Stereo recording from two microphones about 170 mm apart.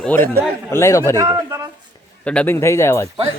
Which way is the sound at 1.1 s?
20° right (ahead or behind).